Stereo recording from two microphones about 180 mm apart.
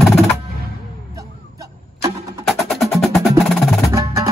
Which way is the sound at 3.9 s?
15° right (ahead or behind).